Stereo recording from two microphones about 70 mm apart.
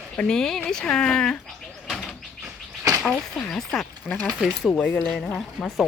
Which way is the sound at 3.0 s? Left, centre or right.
Centre.